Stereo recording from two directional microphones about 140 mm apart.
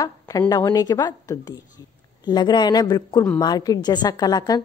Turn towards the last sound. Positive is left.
turn(degrees=30)  # may be behind; listen again after turning